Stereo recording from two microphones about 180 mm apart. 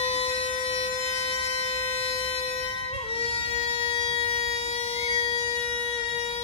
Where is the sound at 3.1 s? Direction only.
30° left (ahead or behind).